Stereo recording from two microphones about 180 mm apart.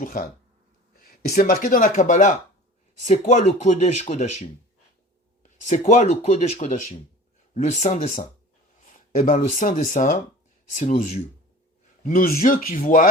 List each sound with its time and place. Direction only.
0.0 s speech: 50° left (ahead or behind)
5.4 s speech: 40° left (ahead or behind)